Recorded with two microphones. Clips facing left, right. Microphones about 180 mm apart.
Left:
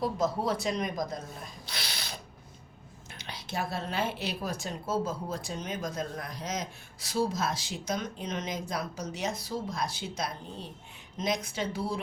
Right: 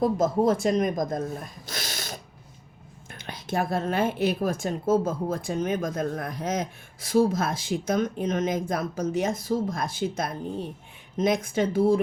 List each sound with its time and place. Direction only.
0.0 s a woman's voice: 50° right (ahead or behind)
1.6 s a sound: 45° right (ahead or behind)
3.1 s a woman's voice: 50° right (ahead or behind)